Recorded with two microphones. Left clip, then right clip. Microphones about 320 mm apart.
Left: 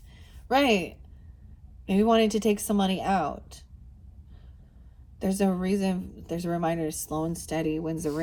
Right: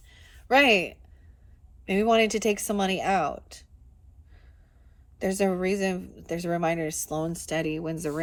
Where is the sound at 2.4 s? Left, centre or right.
Right.